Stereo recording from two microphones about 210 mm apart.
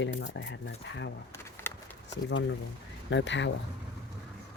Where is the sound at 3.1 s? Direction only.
60° left (ahead or behind).